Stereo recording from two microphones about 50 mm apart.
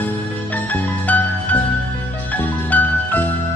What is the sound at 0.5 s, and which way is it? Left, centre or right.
Music, left.